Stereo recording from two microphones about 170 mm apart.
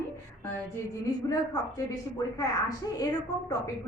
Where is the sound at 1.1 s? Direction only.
25° left (ahead or behind).